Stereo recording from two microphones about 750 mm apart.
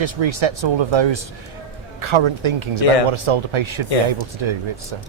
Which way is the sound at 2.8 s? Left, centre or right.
Left.